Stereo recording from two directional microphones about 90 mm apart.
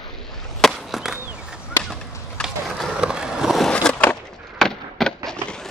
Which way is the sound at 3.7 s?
10° left (ahead or behind).